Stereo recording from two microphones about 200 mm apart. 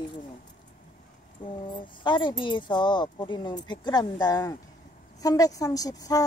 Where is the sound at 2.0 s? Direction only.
25° left (ahead or behind).